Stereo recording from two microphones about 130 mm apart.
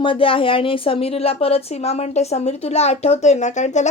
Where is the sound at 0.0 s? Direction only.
45° left (ahead or behind).